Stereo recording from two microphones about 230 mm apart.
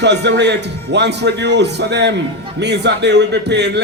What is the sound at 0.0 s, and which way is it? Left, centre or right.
Music, right.